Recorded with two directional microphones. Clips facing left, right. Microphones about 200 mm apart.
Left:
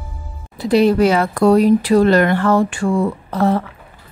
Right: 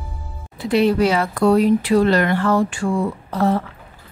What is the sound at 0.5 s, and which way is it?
A woman's voice, 40° left (ahead or behind).